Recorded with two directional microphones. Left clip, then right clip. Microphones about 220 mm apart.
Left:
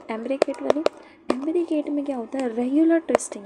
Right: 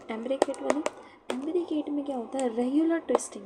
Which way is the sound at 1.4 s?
25° left (ahead or behind).